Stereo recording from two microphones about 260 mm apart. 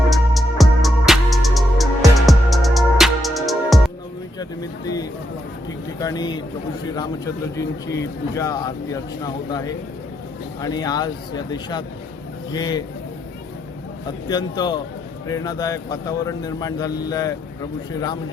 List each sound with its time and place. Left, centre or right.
0.1 s music: centre
6.0 s a man's voice: centre
14.3 s a man's voice: centre